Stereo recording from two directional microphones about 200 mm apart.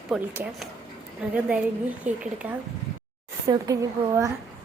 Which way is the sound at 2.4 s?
5° right (ahead or behind).